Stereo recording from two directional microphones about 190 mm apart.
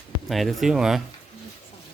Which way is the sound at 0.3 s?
Centre (ahead or behind).